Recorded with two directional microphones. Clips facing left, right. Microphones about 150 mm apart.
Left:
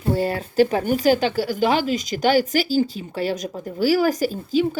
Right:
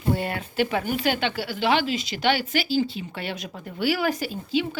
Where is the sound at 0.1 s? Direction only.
35° left (ahead or behind).